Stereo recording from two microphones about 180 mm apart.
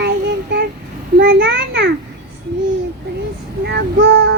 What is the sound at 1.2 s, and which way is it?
Speech, 60° right (ahead or behind).